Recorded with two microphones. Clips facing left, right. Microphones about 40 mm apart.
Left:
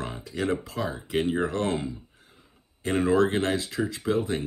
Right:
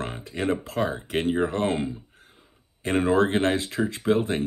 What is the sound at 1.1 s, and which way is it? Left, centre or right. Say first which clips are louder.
Speech: even; right.